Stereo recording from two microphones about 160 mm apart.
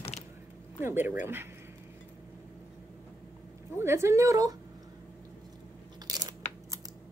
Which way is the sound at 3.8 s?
15° right (ahead or behind).